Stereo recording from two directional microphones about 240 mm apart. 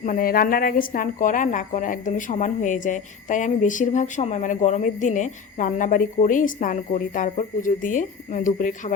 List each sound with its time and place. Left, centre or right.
0.0 s a woman's voice: left